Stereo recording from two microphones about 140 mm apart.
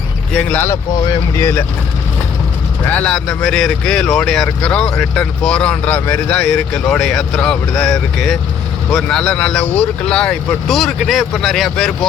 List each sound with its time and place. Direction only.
0.3 s speech: 15° left (ahead or behind)
2.8 s speech: 10° left (ahead or behind)